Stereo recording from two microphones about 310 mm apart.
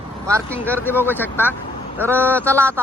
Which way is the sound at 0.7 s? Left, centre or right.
Centre.